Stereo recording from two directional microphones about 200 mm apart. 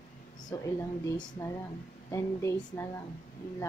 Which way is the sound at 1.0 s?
15° left (ahead or behind).